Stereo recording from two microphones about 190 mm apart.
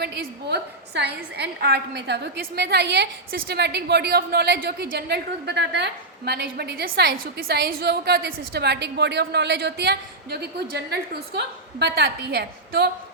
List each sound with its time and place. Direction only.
0.0 s a woman's voice: 60° right (ahead or behind)